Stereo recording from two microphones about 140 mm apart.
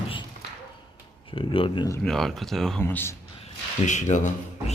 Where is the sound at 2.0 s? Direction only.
Centre (ahead or behind).